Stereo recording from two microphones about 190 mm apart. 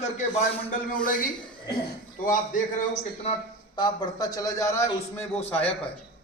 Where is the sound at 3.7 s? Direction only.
20° left (ahead or behind).